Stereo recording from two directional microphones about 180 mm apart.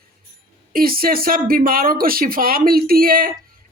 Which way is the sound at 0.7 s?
55° right (ahead or behind).